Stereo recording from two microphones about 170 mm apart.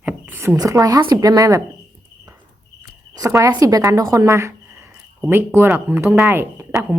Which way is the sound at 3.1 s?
20° right (ahead or behind).